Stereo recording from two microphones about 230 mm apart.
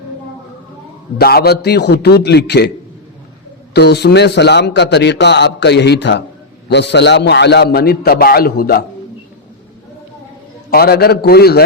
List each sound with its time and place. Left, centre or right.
1.2 s a man's voice: left
3.8 s a man's voice: left
10.7 s a man's voice: left